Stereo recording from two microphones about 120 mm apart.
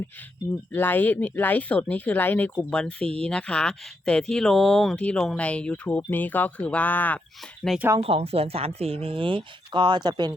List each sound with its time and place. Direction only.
0.7 s speech: 15° left (ahead or behind)
7.7 s speech: centre (ahead or behind)
8.0 s speech: 55° right (ahead or behind); by 10.3 s 35° right (ahead or behind)